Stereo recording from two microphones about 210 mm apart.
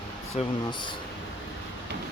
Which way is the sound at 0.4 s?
30° left (ahead or behind).